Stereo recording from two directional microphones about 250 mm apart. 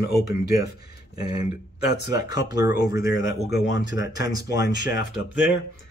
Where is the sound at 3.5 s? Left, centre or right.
Left.